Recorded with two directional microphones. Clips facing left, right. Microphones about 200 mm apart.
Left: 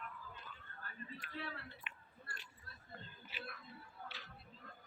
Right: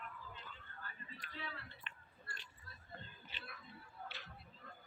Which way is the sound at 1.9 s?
10° left (ahead or behind).